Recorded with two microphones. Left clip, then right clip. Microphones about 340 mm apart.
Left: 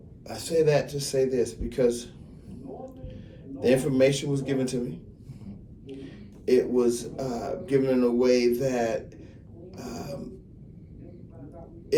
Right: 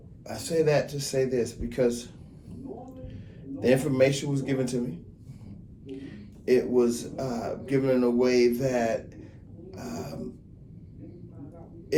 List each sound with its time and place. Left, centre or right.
0.3 s a man's voice: right
3.6 s a man's voice: right
9.7 s gasp: right